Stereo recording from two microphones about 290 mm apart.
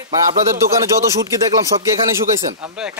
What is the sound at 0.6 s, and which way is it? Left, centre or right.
Speech, centre.